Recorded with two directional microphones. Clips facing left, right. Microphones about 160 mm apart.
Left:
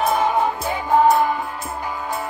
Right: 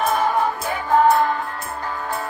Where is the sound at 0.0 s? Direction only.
10° left (ahead or behind).